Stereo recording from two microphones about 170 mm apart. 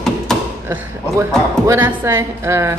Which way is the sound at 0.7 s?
15° right (ahead or behind).